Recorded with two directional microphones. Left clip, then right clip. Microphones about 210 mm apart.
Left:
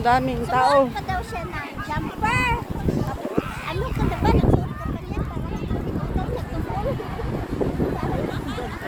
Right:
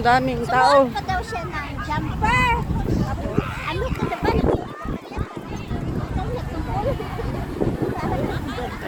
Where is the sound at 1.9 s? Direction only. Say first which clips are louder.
Right 3 dB; 15° left (ahead or behind).